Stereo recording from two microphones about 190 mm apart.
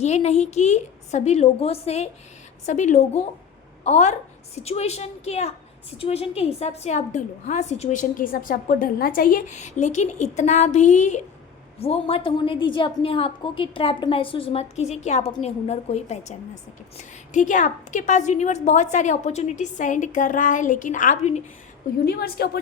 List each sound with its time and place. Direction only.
0.0 s a woman's voice: 35° left (ahead or behind)
22.0 s a woman's voice: 55° left (ahead or behind)